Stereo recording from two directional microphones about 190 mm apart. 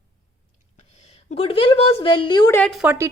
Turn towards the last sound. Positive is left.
turn(degrees=-15)  # may be behind; listen again after turning